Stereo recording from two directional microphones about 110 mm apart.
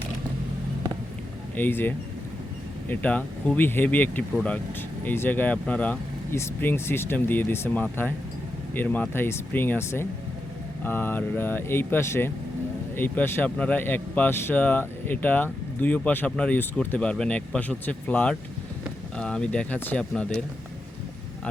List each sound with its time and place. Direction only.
1.5 s a man's voice: 15° left (ahead or behind)